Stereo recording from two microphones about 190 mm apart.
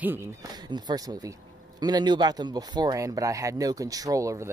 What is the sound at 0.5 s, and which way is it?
Speech, 20° right (ahead or behind).